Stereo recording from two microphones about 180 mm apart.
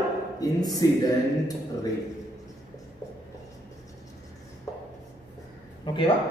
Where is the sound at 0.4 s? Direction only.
20° left (ahead or behind).